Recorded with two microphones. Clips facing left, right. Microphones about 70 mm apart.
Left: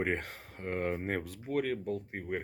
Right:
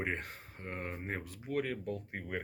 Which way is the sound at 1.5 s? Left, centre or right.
Left.